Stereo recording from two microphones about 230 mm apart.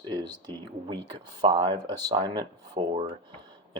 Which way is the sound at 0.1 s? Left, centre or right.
Centre.